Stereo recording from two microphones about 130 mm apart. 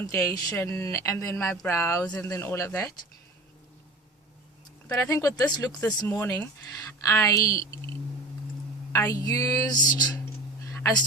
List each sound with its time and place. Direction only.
0.0 s speech: 25° left (ahead or behind)
5.0 s speech: 25° left (ahead or behind)
8.9 s speech: 20° left (ahead or behind)
10.2 s a sound: 20° left (ahead or behind)